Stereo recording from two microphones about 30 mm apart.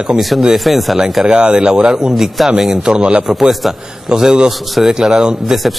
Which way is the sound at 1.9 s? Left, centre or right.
Centre.